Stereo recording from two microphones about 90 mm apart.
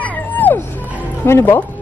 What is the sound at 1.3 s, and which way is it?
Speech, 30° left (ahead or behind).